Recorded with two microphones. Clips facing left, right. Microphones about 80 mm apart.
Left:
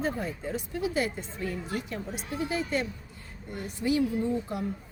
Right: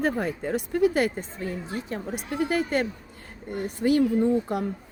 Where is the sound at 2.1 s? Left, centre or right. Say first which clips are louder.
Right 6 dB; right.